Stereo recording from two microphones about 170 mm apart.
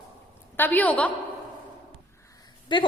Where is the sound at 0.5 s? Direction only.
10° left (ahead or behind).